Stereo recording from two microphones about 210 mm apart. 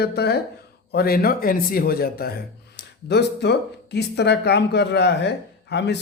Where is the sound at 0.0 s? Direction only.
50° left (ahead or behind).